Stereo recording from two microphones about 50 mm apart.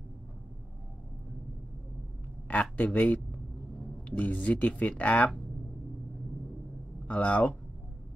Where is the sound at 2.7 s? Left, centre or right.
Left.